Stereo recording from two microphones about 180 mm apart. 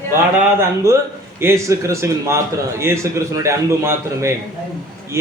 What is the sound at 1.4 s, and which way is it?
A man's voice, 15° right (ahead or behind).